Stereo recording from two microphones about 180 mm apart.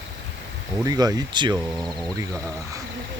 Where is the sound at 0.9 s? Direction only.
20° right (ahead or behind).